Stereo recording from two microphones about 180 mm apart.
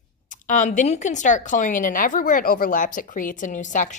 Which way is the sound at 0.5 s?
45° left (ahead or behind).